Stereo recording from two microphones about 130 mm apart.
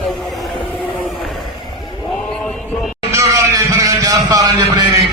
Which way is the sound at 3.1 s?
20° right (ahead or behind).